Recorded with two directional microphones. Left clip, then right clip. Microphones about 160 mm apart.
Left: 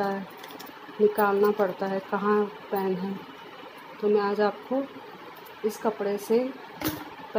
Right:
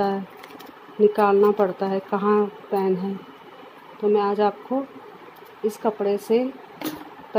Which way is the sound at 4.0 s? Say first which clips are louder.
Right 4 dB; 30° right (ahead or behind).